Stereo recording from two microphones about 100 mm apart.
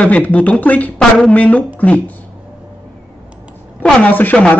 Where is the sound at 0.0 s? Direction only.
15° left (ahead or behind).